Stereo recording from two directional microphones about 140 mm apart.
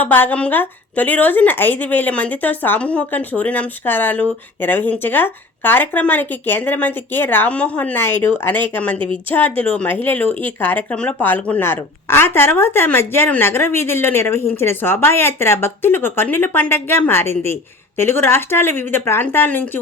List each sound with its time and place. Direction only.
0.0 s a woman's voice: 15° left (ahead or behind)